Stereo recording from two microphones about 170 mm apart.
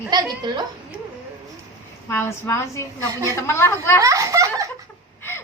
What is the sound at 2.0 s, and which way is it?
A woman's voice, 15° left (ahead or behind).